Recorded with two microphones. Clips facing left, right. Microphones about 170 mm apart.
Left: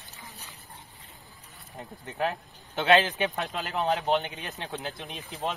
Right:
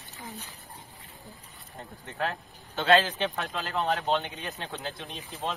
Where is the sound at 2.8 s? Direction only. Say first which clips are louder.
Left 1 dB; 20° left (ahead or behind).